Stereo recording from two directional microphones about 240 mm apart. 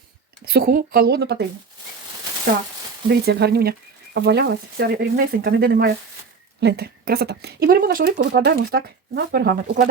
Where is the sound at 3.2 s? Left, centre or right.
Right.